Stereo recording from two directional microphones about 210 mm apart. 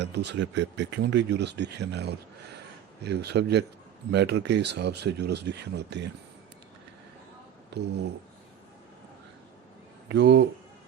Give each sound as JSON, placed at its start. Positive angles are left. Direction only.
{"t": 0.0, "sound": "speech", "side_deg": -55}
{"t": 10.1, "sound": "speech", "side_deg": -55}